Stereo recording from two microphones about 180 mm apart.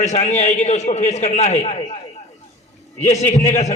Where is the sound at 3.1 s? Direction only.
40° left (ahead or behind).